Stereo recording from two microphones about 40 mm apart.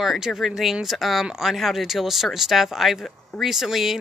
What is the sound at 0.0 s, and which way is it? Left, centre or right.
A woman's voice, centre.